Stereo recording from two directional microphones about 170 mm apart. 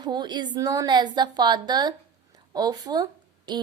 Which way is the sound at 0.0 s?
25° right (ahead or behind).